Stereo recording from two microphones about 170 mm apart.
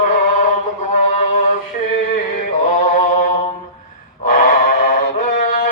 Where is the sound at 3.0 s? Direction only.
50° left (ahead or behind).